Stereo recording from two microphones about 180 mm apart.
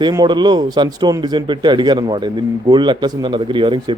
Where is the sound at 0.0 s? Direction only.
25° right (ahead or behind).